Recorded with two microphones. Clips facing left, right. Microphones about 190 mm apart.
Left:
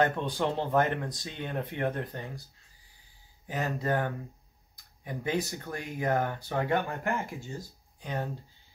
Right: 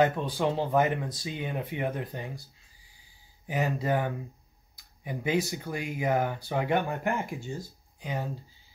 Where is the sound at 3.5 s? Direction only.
10° right (ahead or behind).